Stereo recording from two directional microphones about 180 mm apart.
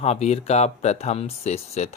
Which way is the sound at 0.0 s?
35° left (ahead or behind).